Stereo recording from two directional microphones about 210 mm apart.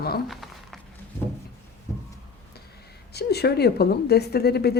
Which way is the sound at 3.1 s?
50° left (ahead or behind).